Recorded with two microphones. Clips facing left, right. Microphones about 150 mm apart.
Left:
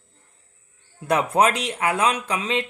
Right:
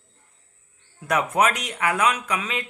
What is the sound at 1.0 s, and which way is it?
Speech, 30° left (ahead or behind).